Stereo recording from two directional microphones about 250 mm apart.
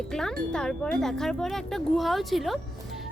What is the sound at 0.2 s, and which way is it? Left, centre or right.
Speech, centre.